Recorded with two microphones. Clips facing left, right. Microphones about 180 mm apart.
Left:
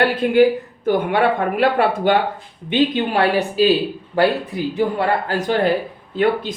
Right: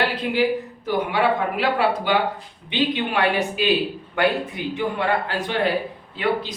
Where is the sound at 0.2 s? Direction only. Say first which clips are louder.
Left 7 dB; 50° left (ahead or behind).